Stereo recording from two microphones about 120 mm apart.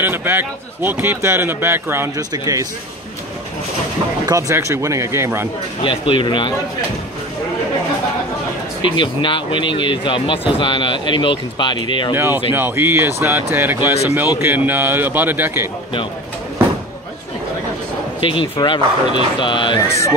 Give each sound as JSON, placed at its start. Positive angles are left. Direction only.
{"t": 0.0, "sound": "speech", "side_deg": -20}
{"t": 2.1, "sound": "speech", "side_deg": -30}
{"t": 4.3, "sound": "speech", "side_deg": -25}
{"t": 5.8, "sound": "speech", "side_deg": 45}
{"t": 8.8, "sound": "speech", "side_deg": 45}
{"t": 12.1, "sound": "a man's voice", "side_deg": -15}
{"t": 18.2, "sound": "speech", "side_deg": 45}